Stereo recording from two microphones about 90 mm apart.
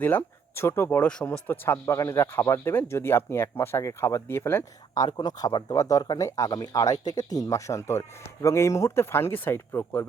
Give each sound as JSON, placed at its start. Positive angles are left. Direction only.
{"t": 0.0, "sound": "speech", "side_deg": 20}
{"t": 1.0, "sound": "speech", "side_deg": 10}
{"t": 1.5, "sound": "speech", "side_deg": 25}
{"t": 4.9, "sound": "speech", "side_deg": 50}
{"t": 5.7, "sound": "speech", "side_deg": 40}